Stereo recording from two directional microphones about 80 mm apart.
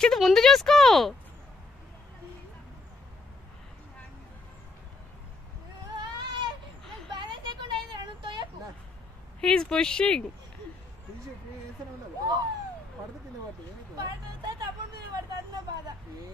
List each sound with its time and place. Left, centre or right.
0.0 s speech: centre
5.9 s a sound: right
7.1 s vehicle: right
9.4 s speech: centre
12.2 s a sound: right
13.9 s vehicle: right